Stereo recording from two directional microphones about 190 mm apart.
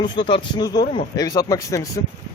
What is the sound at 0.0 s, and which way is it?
Speech, 25° left (ahead or behind).